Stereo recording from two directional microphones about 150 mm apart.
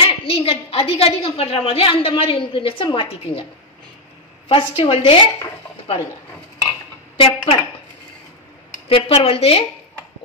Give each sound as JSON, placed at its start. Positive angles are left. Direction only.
{"t": 0.0, "sound": "a woman's voice", "side_deg": 35}
{"t": 4.5, "sound": "a woman's voice", "side_deg": 35}
{"t": 7.2, "sound": "a woman's voice", "side_deg": 40}
{"t": 8.8, "sound": "a woman's voice", "side_deg": 40}